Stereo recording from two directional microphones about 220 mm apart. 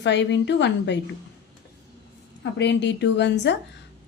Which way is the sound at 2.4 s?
50° left (ahead or behind).